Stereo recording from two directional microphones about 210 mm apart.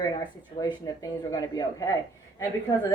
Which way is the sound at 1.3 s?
15° left (ahead or behind).